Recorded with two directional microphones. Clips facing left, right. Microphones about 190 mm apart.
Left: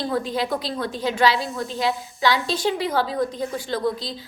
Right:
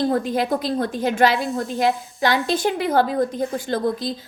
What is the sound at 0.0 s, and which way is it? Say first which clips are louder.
A woman's voice: right 4 dB; 50° right (ahead or behind).